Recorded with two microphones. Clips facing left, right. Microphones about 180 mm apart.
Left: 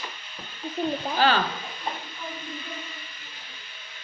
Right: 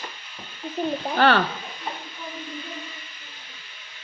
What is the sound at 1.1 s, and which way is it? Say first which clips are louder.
Speech: right 4 dB; 60° right (ahead or behind).